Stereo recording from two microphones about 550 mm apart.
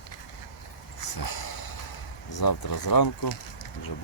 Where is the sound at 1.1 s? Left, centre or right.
Left.